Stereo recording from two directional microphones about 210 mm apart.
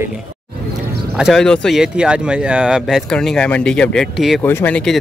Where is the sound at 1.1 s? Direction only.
Centre (ahead or behind).